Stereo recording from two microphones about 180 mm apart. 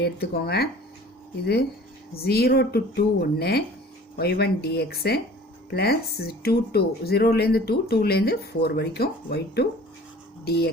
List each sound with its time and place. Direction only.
0.0 s speech: 60° left (ahead or behind)
2.1 s speech: 60° left (ahead or behind)